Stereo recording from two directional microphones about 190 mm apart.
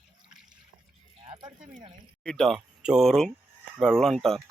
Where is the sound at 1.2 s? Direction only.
25° right (ahead or behind).